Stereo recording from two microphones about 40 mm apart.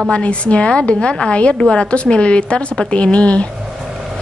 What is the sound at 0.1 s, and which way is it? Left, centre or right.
A woman's voice, left.